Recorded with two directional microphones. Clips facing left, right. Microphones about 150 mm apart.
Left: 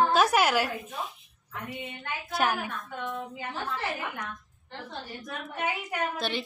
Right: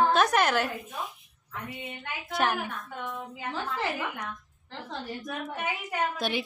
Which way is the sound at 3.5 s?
90° right.